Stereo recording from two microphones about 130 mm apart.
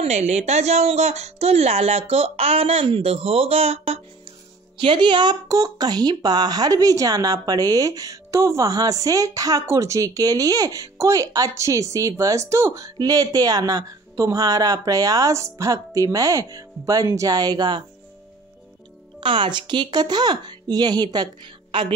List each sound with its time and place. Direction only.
0.0 s speech: 60° right (ahead or behind)
4.7 s speech: 40° right (ahead or behind)
19.1 s speech: 40° right (ahead or behind)